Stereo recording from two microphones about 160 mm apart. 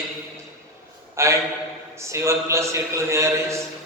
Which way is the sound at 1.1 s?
15° right (ahead or behind).